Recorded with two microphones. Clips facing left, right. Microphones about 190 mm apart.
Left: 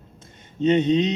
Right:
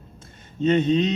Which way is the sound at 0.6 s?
20° left (ahead or behind).